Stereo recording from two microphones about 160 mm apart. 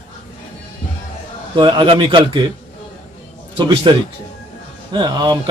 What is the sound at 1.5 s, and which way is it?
Speech, 30° right (ahead or behind).